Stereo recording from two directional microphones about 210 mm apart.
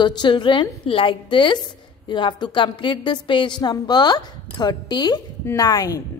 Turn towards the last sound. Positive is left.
turn(degrees=15)  # may be behind; listen again after turning